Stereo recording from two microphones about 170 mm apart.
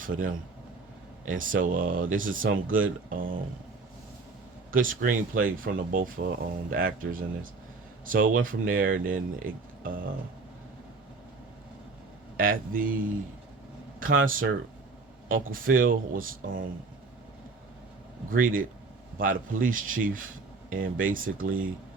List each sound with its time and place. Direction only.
0.0 s speech: 55° right (ahead or behind)
1.4 s speech: 55° right (ahead or behind)
4.7 s speech: 55° right (ahead or behind)
12.4 s speech: 55° right (ahead or behind)
14.0 s speech: 55° right (ahead or behind)
18.3 s speech: 55° right (ahead or behind)